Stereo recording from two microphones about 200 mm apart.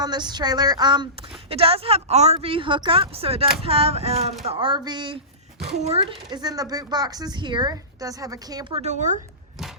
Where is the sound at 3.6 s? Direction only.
30° right (ahead or behind).